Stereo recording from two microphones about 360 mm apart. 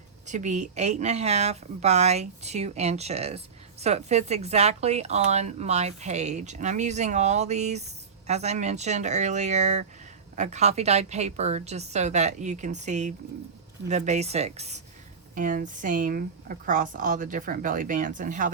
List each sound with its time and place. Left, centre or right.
0.3 s speech: centre